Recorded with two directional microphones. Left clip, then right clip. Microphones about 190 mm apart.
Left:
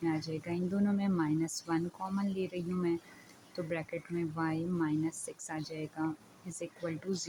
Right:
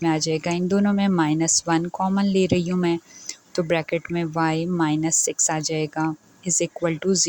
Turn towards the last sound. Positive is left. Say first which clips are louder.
# right 16 dB
turn(degrees=-40)  # may be behind; listen again after turning